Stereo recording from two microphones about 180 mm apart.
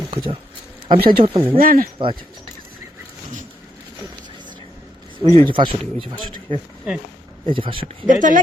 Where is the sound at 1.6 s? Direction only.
50° right (ahead or behind).